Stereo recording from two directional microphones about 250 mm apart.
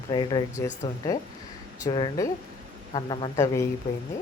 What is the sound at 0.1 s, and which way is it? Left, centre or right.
A woman's voice, centre.